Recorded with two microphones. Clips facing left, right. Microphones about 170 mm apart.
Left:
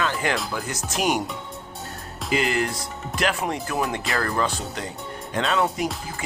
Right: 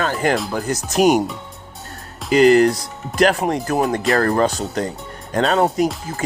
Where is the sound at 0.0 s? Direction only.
45° right (ahead or behind).